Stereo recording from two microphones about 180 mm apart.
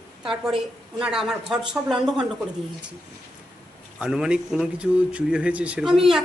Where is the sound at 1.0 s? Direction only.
5° right (ahead or behind).